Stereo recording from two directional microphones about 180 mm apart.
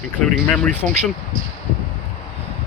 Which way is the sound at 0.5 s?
5° left (ahead or behind).